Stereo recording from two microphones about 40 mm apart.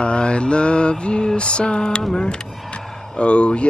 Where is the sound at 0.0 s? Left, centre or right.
Left.